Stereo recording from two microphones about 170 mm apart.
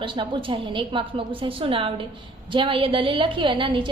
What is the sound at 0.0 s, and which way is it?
A woman's voice, 30° right (ahead or behind).